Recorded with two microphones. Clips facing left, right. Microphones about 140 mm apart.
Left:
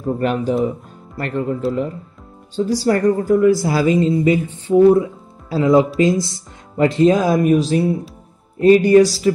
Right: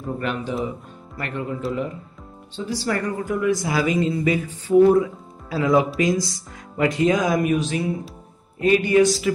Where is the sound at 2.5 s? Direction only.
40° left (ahead or behind).